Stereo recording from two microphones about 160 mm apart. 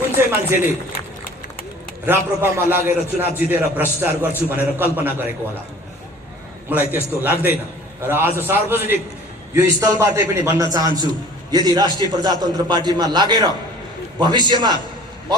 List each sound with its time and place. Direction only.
0.2 s a man's voice: 15° right (ahead or behind)
2.0 s a man's voice: 15° right (ahead or behind)
6.7 s a man's voice: 10° right (ahead or behind); by 14.8 s 30° right (ahead or behind)